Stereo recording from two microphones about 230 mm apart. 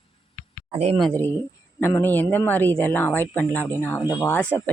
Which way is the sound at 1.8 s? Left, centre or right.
Centre.